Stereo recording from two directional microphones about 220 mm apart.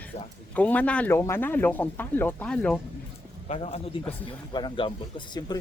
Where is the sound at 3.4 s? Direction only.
30° left (ahead or behind).